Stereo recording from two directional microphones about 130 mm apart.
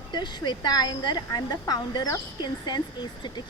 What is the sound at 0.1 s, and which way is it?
A woman's voice, 35° left (ahead or behind).